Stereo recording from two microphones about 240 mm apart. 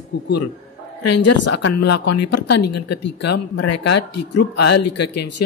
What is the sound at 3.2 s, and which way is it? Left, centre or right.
Speech, left.